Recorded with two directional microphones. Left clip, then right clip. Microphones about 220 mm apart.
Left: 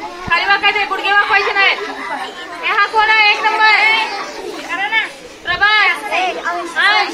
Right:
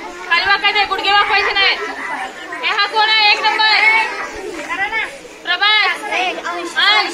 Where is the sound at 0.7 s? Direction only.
40° right (ahead or behind).